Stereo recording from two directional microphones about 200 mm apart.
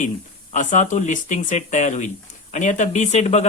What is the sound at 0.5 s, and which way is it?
Speech, 40° left (ahead or behind).